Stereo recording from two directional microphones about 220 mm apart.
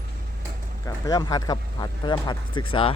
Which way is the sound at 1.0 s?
15° left (ahead or behind).